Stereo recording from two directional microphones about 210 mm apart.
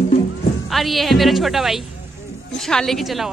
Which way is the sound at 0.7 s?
Centre (ahead or behind).